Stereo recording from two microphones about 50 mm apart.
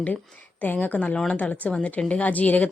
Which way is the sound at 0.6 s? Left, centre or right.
Left.